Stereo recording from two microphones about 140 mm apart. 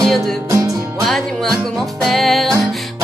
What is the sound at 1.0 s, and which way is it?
Music, centre (ahead or behind).